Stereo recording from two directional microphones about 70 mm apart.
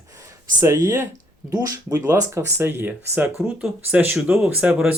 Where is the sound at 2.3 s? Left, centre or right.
Right.